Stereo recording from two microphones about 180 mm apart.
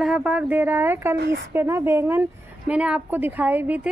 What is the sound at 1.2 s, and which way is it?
Speech, 65° right (ahead or behind).